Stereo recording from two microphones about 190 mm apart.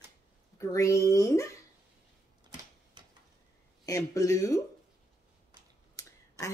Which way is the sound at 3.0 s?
25° right (ahead or behind).